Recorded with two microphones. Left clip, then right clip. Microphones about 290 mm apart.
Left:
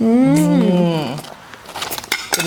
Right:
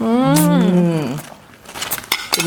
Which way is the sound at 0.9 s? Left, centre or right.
Left.